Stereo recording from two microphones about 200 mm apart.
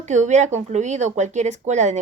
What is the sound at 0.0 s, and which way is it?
Speech, 35° right (ahead or behind).